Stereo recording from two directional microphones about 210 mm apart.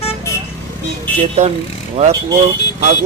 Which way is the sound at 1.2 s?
30° right (ahead or behind).